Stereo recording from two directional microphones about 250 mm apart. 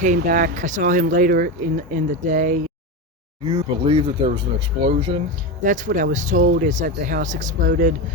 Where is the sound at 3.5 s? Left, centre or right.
Centre.